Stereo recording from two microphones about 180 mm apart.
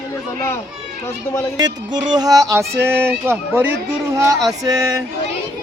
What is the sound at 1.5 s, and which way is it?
Music, 20° right (ahead or behind).